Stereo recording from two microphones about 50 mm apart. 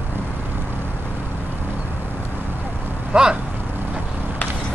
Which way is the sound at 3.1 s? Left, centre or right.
Centre.